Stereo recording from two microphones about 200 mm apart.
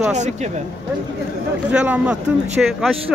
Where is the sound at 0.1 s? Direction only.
35° right (ahead or behind).